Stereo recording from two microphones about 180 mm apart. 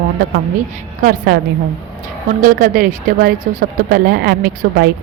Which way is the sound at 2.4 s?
50° right (ahead or behind).